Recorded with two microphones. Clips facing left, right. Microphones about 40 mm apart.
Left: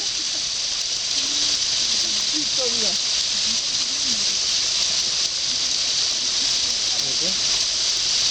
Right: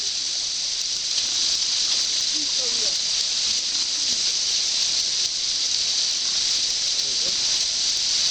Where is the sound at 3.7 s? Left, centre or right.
Left.